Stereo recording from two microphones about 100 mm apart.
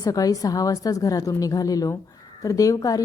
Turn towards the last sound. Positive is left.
turn(degrees=35)  # may be behind; listen again after turning